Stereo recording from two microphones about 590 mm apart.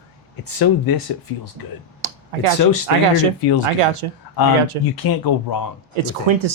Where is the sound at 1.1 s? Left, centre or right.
Left.